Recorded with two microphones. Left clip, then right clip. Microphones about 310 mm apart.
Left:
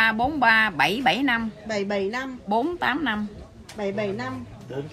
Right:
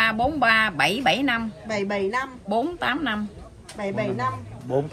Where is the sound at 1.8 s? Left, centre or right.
Centre.